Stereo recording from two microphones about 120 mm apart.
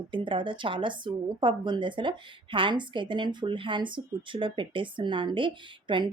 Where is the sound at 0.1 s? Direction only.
45° right (ahead or behind).